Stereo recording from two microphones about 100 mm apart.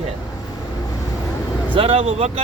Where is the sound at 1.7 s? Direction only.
75° right (ahead or behind).